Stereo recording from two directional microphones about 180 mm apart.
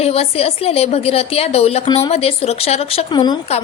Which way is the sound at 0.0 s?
35° left (ahead or behind).